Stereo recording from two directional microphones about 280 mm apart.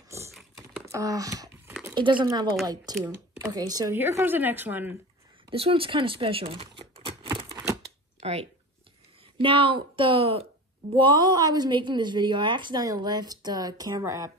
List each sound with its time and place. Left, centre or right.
0.1 s typing: centre
0.6 s computer keyboard: centre
1.7 s a sound: centre
2.6 s a woman's voice: centre
5.5 s speech: centre
6.8 s scissors: centre
8.2 s a woman's voice: right